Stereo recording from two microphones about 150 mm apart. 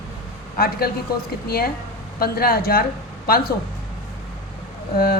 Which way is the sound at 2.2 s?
90° left.